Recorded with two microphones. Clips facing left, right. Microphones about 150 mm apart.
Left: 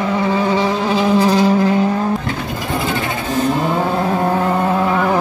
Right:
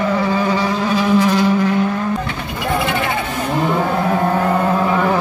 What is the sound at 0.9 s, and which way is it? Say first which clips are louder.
Insect: left 1 dB; 35° left (ahead or behind).